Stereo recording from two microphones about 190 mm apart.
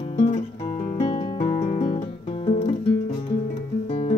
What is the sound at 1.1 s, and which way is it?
Music, 25° left (ahead or behind).